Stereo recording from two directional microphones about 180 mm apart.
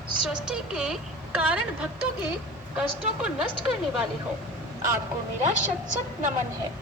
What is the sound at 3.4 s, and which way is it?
Speech, 5° right (ahead or behind).